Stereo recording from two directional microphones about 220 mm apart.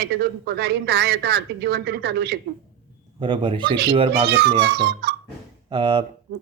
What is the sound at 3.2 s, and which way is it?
Speech, 20° right (ahead or behind).